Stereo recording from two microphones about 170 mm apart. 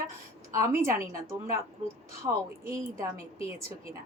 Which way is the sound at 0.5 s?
15° right (ahead or behind).